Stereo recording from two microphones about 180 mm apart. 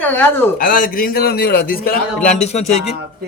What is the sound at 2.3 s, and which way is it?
Speech, 40° left (ahead or behind).